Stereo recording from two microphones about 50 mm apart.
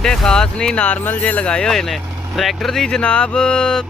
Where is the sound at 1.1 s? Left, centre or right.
Left.